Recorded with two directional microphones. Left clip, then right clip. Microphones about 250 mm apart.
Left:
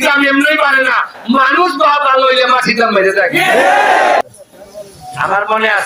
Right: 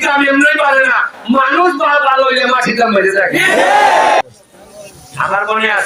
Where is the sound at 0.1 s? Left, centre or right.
Left.